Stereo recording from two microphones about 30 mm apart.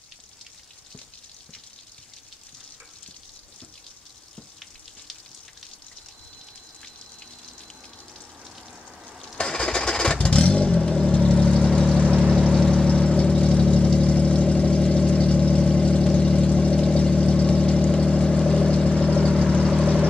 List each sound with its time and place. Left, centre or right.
9.4 s vehicle: left
12.2 s vehicle: right
12.4 s vehicle: left
19.6 s vehicle: left